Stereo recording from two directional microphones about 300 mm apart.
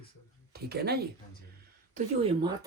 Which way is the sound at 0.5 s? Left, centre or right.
Right.